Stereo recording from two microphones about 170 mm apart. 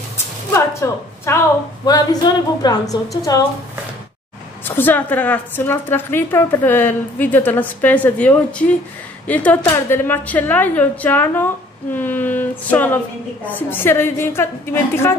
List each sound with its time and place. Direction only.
0.5 s a woman's voice: 15° left (ahead or behind)
4.6 s a woman's voice: 10° left (ahead or behind)